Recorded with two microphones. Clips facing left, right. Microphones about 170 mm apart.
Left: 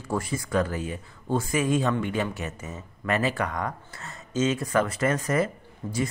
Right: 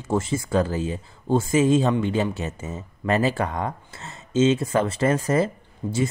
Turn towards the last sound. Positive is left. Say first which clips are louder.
# right 4 dB
turn(degrees=-30)  # may be behind; listen again after turning